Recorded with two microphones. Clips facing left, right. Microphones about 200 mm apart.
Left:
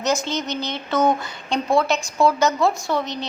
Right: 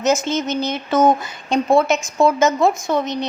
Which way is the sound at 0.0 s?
20° right (ahead or behind).